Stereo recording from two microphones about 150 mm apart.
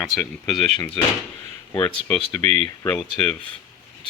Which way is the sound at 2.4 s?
45° right (ahead or behind).